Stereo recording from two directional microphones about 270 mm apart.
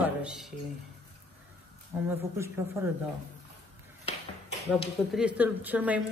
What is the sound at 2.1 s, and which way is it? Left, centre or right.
Speech, centre.